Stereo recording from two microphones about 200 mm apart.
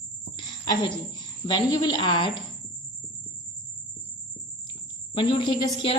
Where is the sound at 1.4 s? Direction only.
20° left (ahead or behind).